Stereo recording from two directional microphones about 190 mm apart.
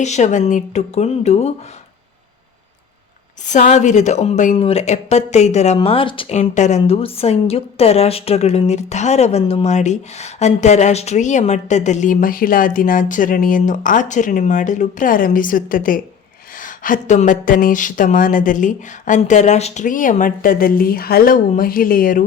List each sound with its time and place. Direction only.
0.0 s a woman's voice: 40° left (ahead or behind)
3.4 s a woman's voice: 40° left (ahead or behind)